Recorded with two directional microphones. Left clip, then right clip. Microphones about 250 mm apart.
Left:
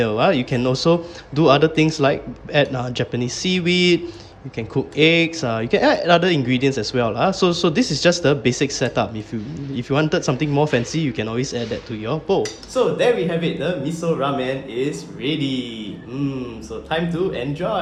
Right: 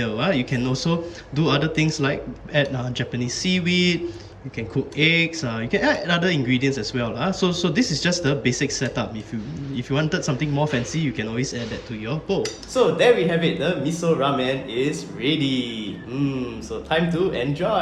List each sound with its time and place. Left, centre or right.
0.0 s speech: centre
12.7 s a man's voice: centre